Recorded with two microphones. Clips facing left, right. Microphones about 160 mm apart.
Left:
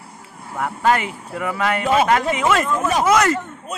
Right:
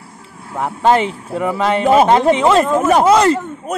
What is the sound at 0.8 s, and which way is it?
Speech, 25° right (ahead or behind).